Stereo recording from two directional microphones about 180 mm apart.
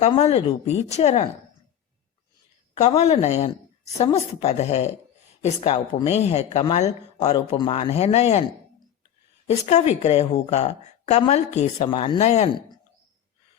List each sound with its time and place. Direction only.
0.0 s a woman's voice: 35° left (ahead or behind)
2.7 s a woman's voice: 40° left (ahead or behind)
9.5 s a woman's voice: 35° left (ahead or behind)